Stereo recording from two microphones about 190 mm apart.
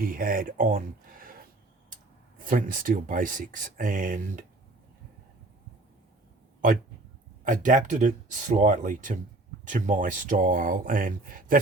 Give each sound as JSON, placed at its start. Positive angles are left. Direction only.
{"t": 0.0, "sound": "speech", "side_deg": -50}
{"t": 2.4, "sound": "speech", "side_deg": -45}
{"t": 7.4, "sound": "speech", "side_deg": -45}